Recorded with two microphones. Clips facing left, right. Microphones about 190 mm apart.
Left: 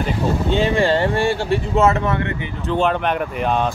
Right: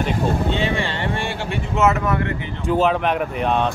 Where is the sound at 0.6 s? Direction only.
40° left (ahead or behind).